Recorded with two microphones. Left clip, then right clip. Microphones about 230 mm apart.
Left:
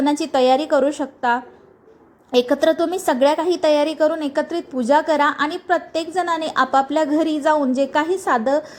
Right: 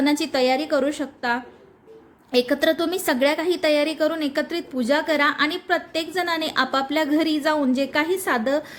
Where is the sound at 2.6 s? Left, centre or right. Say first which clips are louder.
Left 3 dB; centre.